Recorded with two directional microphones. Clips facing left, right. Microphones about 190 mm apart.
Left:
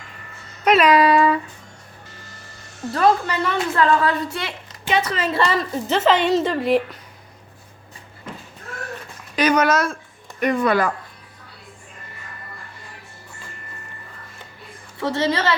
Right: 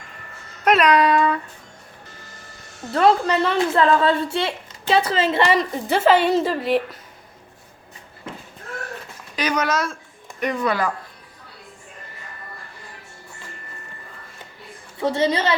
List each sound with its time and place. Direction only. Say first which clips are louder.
0.6 s a sound: left 1 dB; centre (ahead or behind)
2.9 s a woman's voice: right 2 dB; 25° right (ahead or behind); by 6.8 s centre (ahead or behind)
9.3 s speech: left 5 dB; 55° left (ahead or behind)
15.0 s a woman's voice: right 1 dB; 15° right (ahead or behind)